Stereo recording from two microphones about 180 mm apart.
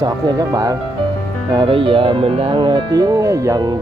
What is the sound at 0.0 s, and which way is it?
Speech, 20° right (ahead or behind).